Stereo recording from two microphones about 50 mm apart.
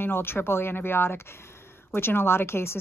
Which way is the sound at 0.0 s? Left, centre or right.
Left.